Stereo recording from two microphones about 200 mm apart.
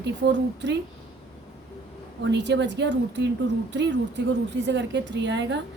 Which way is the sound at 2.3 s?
60° right (ahead or behind).